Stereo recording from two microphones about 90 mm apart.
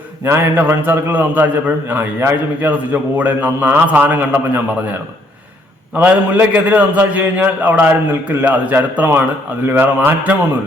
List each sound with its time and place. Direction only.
0.3 s a man's voice: 20° right (ahead or behind)
6.0 s a man's voice: 20° right (ahead or behind)